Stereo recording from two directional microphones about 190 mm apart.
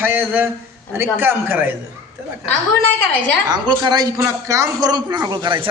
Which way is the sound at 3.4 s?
20° right (ahead or behind).